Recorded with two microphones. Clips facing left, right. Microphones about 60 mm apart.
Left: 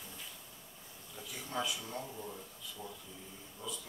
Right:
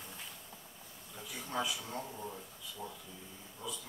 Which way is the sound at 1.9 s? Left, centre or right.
Right.